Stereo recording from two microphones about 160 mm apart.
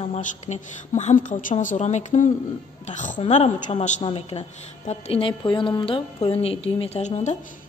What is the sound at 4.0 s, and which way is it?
A woman's voice, 35° left (ahead or behind).